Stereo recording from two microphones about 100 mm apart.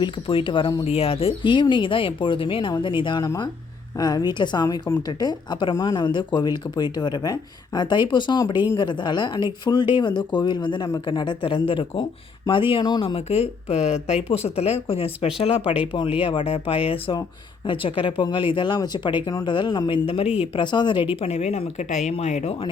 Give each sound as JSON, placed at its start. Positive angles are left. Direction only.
{"t": 0.0, "sound": "speech", "side_deg": 60}
{"t": 0.9, "sound": "speech", "side_deg": 80}
{"t": 3.2, "sound": "speech", "side_deg": 40}
{"t": 13.1, "sound": "speech", "side_deg": 85}
{"t": 15.9, "sound": "speech", "side_deg": 60}
{"t": 20.4, "sound": "speech", "side_deg": 50}
{"t": 21.2, "sound": "speech", "side_deg": 90}
{"t": 22.1, "sound": "speech", "side_deg": 70}